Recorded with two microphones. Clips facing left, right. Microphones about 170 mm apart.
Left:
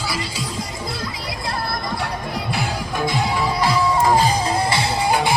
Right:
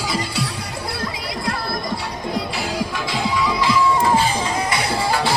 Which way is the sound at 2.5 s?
50° left (ahead or behind).